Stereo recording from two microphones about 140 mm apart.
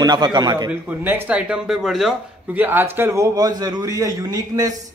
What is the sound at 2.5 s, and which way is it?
A man's voice, 15° right (ahead or behind).